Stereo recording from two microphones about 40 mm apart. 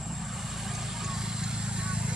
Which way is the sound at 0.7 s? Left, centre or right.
Centre.